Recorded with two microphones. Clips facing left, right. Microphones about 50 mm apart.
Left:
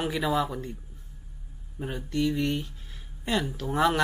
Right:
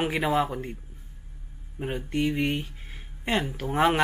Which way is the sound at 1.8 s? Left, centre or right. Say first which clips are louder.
Right 1 dB; right.